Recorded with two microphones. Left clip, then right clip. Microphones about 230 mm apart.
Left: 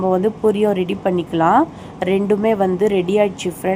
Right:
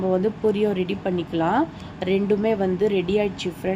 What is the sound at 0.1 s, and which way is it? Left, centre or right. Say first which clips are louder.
A woman's voice: left 4 dB; centre.